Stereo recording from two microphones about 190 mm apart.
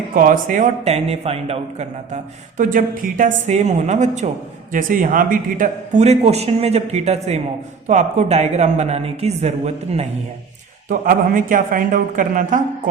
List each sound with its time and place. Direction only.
0.1 s speech: 45° right (ahead or behind)
10.8 s speech: 45° right (ahead or behind)